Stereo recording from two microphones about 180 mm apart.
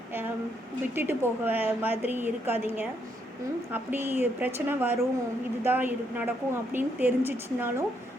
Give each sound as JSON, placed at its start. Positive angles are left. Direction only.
{"t": 0.9, "sound": "a woman's voice", "side_deg": -10}
{"t": 3.7, "sound": "a woman's voice", "side_deg": -10}